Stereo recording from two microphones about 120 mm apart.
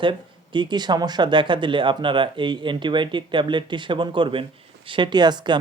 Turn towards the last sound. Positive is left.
turn(degrees=-40)  # may be behind; listen again after turning